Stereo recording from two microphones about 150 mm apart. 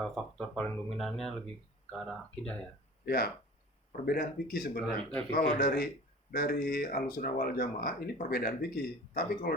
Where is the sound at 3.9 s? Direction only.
65° left (ahead or behind).